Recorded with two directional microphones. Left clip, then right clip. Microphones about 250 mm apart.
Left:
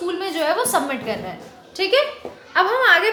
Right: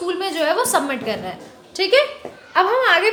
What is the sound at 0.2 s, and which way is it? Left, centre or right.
A woman's voice, centre.